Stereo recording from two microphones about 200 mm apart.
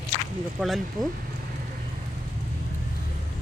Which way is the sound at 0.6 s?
5° left (ahead or behind).